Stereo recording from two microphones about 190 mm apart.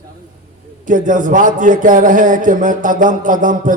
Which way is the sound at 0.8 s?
45° right (ahead or behind).